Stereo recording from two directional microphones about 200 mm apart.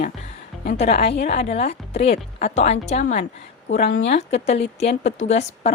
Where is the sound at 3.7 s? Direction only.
45° left (ahead or behind).